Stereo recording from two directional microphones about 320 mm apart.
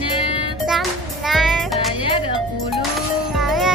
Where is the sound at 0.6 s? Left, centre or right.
Centre.